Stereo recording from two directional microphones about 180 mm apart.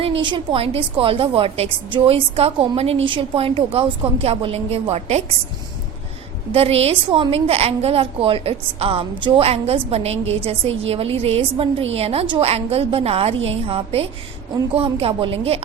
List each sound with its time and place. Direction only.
0.0 s a woman's voice: 30° right (ahead or behind)
6.5 s a woman's voice: 35° right (ahead or behind)